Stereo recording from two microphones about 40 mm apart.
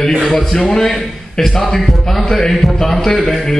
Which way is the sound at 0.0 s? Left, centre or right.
Centre.